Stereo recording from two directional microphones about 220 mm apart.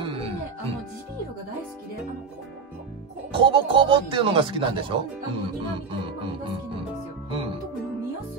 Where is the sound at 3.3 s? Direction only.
25° right (ahead or behind).